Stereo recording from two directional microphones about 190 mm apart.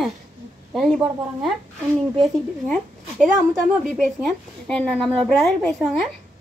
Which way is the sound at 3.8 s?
Centre (ahead or behind).